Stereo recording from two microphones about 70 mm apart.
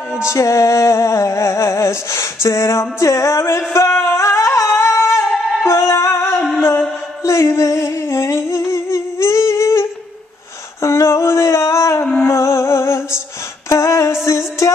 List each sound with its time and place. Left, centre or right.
0.3 s music: left
7.2 s humming: left
10.8 s a sound: left
12.0 s music: left
13.7 s female singing: left
14.2 s music: left